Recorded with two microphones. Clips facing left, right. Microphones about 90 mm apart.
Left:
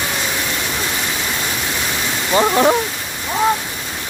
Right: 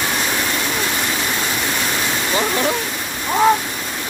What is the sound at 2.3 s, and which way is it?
Speech, 35° left (ahead or behind).